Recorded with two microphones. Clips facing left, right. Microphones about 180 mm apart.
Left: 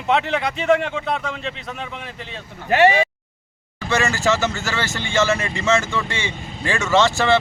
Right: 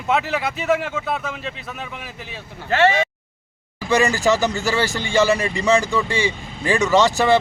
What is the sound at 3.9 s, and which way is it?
Speech, 15° right (ahead or behind).